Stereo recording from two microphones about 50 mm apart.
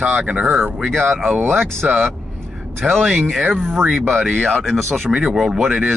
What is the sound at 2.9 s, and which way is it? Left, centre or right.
Speech, centre.